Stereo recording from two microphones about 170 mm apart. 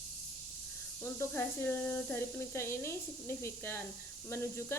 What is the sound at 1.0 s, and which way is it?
Speech, 15° left (ahead or behind).